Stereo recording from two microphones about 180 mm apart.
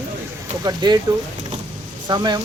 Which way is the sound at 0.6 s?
25° right (ahead or behind).